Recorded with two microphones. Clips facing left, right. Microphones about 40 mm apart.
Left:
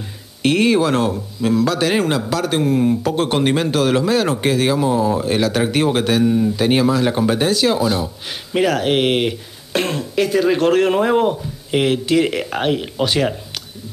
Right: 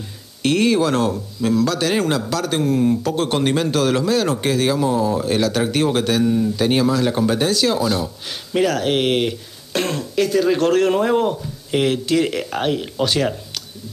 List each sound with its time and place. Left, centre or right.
0.4 s speech: centre